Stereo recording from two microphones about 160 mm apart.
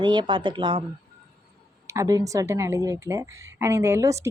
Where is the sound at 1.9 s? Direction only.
20° right (ahead or behind).